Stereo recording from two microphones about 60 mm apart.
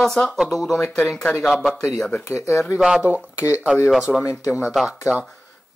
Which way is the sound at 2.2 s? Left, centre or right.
Left.